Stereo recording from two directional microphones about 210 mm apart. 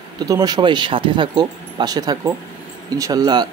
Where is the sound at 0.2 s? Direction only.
20° right (ahead or behind).